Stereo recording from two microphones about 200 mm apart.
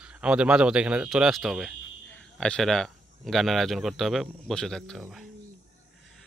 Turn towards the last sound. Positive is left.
turn(degrees=5)  # may be behind; listen again after turning